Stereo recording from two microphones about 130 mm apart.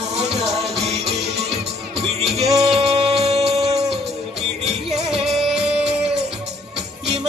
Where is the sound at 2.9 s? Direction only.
50° right (ahead or behind).